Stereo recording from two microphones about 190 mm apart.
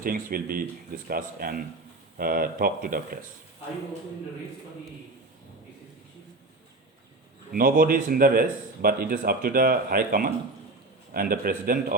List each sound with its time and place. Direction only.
0.0 s speech: 50° right (ahead or behind)
7.5 s speech: 50° right (ahead or behind)